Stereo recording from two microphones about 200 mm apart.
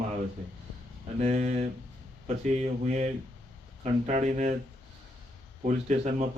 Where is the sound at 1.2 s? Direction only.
35° right (ahead or behind).